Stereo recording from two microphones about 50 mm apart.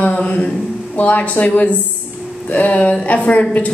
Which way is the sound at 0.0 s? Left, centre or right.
Left.